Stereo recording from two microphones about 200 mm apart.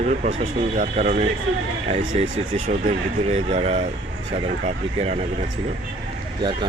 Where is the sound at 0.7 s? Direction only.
35° right (ahead or behind).